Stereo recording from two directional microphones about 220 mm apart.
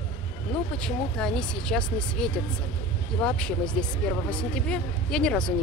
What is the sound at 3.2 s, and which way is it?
Speech, 5° left (ahead or behind).